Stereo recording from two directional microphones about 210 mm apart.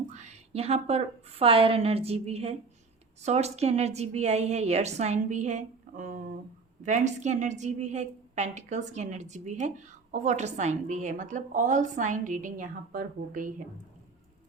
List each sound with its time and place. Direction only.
0.1 s a woman's voice: 30° right (ahead or behind)